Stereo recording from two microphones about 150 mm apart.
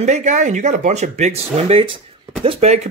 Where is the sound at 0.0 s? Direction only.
50° right (ahead or behind).